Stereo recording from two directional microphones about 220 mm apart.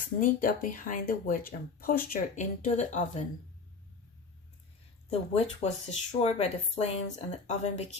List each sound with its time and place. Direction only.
0.2 s speech: 35° left (ahead or behind)
5.3 s speech: 30° left (ahead or behind)